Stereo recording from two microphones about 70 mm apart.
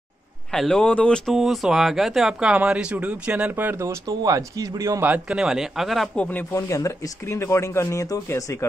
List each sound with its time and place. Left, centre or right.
0.5 s speech: centre
0.8 s a sound: centre
1.2 s speech: centre
3.3 s speech: right
4.2 s a man's voice: right
5.3 s speech: centre
6.1 s speech: left
6.5 s speech: left